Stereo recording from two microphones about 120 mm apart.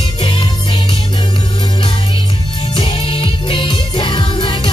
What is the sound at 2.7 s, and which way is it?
Music, 45° left (ahead or behind).